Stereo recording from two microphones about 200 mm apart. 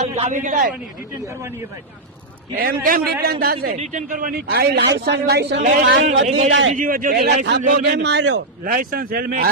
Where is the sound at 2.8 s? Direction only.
50° right (ahead or behind).